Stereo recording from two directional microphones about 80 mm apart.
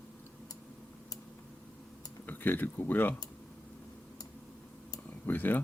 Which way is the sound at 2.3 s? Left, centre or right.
Left.